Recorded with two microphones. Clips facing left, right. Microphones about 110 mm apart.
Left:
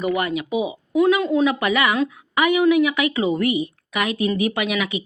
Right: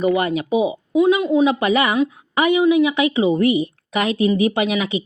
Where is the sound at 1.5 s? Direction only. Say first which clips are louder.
Right 2 dB; 30° right (ahead or behind).